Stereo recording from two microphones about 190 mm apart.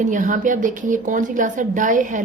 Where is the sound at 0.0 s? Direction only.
40° right (ahead or behind).